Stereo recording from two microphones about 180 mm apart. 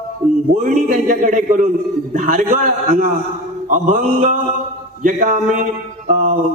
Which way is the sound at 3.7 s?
45° right (ahead or behind).